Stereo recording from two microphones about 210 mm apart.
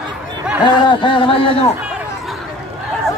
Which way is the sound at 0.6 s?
20° left (ahead or behind).